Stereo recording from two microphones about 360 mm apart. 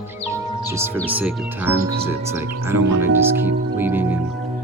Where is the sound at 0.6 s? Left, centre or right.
Centre.